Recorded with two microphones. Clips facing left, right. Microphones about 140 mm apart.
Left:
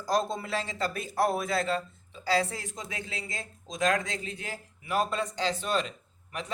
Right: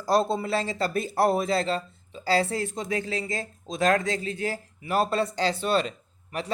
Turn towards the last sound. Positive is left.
turn(degrees=-40)  # may be behind; listen again after turning